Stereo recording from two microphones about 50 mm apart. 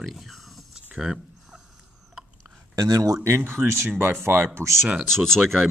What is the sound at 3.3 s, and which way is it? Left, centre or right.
Speech, right.